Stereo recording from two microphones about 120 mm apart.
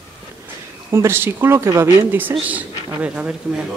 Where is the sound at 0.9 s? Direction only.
20° right (ahead or behind).